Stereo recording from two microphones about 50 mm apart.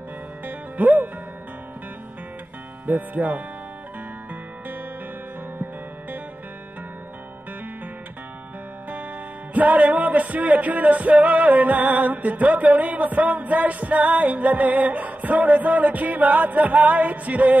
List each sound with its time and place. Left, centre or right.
0.5 s music: right
2.9 s music: right
9.5 s music: right